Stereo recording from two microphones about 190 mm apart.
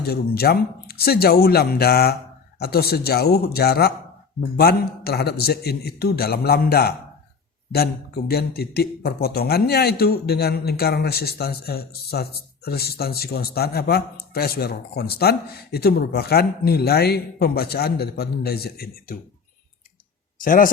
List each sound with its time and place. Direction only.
0.0 s a man's voice: 55° left (ahead or behind)
20.4 s speech: 45° left (ahead or behind)